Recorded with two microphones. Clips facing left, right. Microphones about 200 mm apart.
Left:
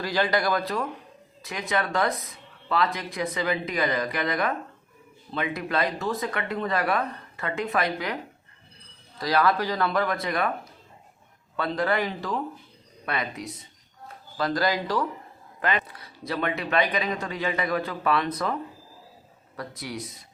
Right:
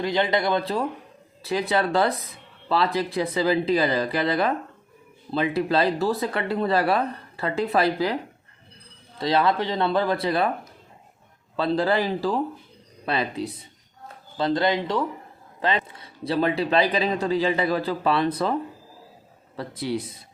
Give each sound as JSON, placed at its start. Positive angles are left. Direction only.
{"t": 0.0, "sound": "speech", "side_deg": -20}
{"t": 11.5, "sound": "speech", "side_deg": -30}
{"t": 19.5, "sound": "speech", "side_deg": -30}